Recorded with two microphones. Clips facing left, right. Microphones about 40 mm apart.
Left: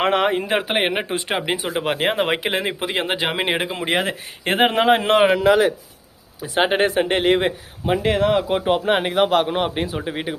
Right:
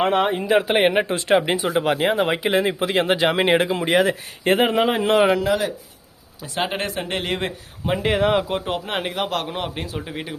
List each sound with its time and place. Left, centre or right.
0.0 s speech: left
0.4 s speech: left
0.7 s speech: centre
2.0 s speech: left
2.5 s speech: left
2.8 s speech: centre
3.8 s speech: left
4.7 s speech: left
5.4 s speech: left
6.6 s a man's voice: left
7.9 s speech: centre
8.4 s a man's voice: centre